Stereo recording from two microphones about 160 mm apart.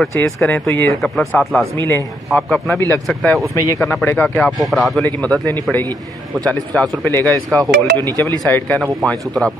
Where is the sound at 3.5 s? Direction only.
15° left (ahead or behind).